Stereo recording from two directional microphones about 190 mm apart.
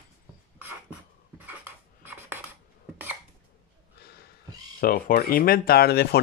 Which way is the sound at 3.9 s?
55° left (ahead or behind).